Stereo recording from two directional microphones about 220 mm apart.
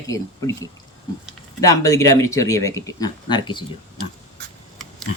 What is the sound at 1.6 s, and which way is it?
Speech, 15° left (ahead or behind).